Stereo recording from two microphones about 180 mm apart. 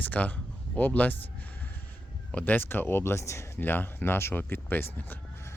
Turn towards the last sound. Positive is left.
turn(degrees=10)  # may be behind; listen again after turning